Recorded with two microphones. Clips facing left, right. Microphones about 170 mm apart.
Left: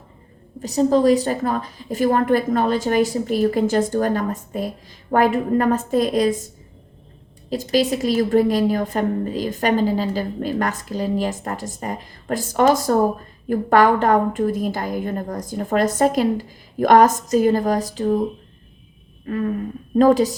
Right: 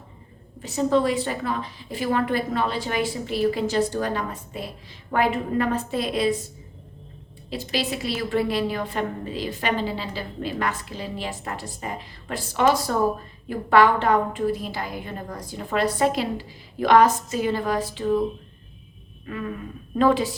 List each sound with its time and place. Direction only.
0.6 s a woman's voice: 40° left (ahead or behind)
7.5 s a woman's voice: 45° left (ahead or behind)